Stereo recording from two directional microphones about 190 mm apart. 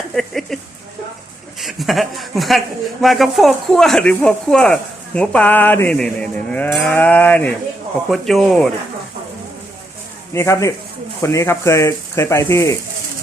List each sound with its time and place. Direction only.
0.1 s a woman's voice: centre (ahead or behind)
1.6 s a woman's voice: centre (ahead or behind)
10.3 s speech: 15° left (ahead or behind)